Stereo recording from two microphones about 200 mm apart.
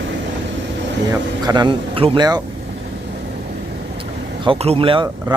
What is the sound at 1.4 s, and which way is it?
Speech, 20° right (ahead or behind).